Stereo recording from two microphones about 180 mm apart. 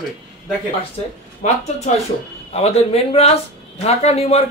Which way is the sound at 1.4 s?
40° left (ahead or behind).